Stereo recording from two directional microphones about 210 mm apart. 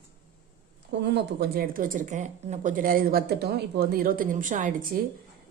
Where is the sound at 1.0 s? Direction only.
55° right (ahead or behind).